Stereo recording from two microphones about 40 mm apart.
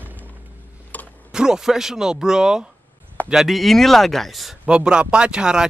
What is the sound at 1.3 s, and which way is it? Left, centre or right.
Speech, centre.